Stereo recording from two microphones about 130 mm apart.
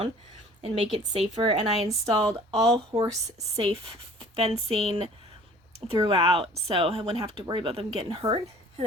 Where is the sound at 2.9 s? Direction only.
40° right (ahead or behind).